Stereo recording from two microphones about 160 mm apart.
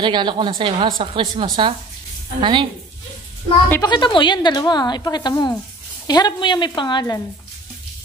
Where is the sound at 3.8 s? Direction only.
30° left (ahead or behind).